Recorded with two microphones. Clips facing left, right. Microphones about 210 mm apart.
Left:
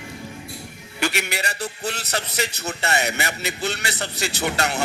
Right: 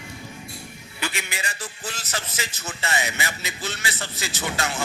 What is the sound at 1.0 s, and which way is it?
A man's voice, 70° left (ahead or behind).